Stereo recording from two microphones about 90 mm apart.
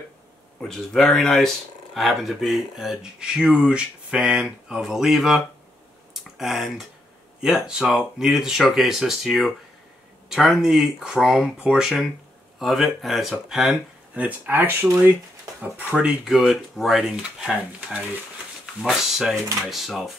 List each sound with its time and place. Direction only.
0.6 s speech: 5° left (ahead or behind)
14.1 s speech: 20° right (ahead or behind)
16.1 s speech: 5° right (ahead or behind)